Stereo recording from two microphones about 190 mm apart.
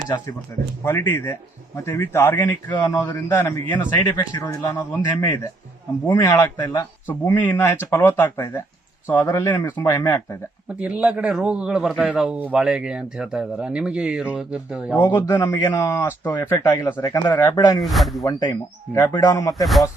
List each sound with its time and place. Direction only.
0.5 s speech: 15° left (ahead or behind)
10.8 s a man's voice: 5° right (ahead or behind)
14.9 s speech: 10° left (ahead or behind)
17.7 s a man's voice: centre (ahead or behind)
18.2 s speech: 20° left (ahead or behind)